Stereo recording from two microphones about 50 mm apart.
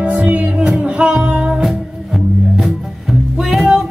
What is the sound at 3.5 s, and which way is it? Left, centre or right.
Music, centre.